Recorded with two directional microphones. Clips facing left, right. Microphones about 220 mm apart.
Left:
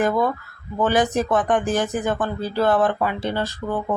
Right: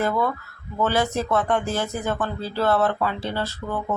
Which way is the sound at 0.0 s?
15° left (ahead or behind).